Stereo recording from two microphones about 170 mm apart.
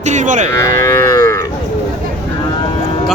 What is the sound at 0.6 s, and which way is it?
Livestock, 15° left (ahead or behind).